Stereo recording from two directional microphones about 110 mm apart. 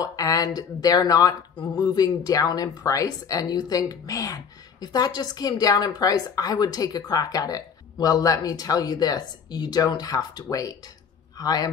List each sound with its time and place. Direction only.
0.0 s speech: 35° left (ahead or behind)